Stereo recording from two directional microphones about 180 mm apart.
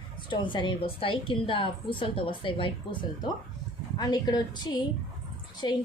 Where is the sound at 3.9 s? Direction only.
20° left (ahead or behind).